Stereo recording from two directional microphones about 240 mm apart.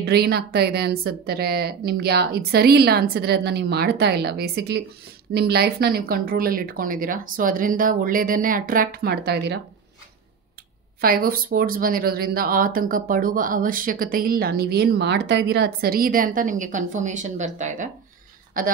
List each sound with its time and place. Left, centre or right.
0.0 s speech: right
11.0 s speech: right